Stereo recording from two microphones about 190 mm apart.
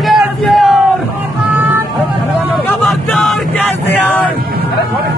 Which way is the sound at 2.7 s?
5° left (ahead or behind).